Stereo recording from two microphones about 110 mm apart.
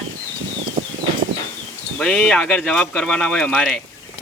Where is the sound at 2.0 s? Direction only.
5° left (ahead or behind).